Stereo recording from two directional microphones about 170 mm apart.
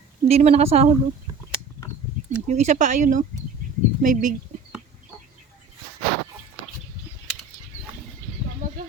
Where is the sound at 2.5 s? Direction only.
45° right (ahead or behind).